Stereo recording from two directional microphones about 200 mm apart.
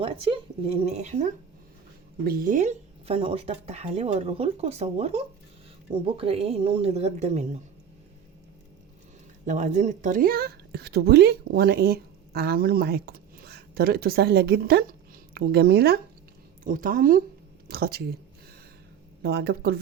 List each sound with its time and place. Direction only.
0.0 s speech: 25° right (ahead or behind)
2.2 s speech: 45° right (ahead or behind)
9.5 s a woman's voice: 35° right (ahead or behind); by 18.1 s 50° right (ahead or behind)
19.2 s a woman's voice: 55° right (ahead or behind)